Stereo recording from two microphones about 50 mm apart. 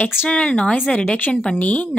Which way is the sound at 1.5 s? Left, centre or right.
Left.